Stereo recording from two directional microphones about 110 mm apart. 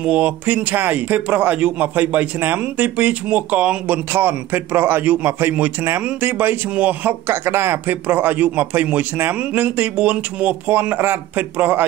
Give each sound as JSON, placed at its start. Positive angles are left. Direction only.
{"t": 0.0, "sound": "a man's voice", "side_deg": -10}